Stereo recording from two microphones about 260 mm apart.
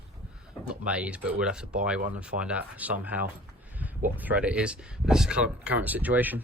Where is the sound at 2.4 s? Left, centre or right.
Centre.